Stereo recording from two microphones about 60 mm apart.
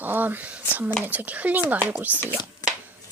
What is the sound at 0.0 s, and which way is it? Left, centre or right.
Speech, right.